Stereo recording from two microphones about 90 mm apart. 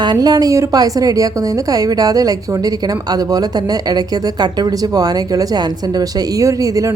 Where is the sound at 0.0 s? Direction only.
50° right (ahead or behind).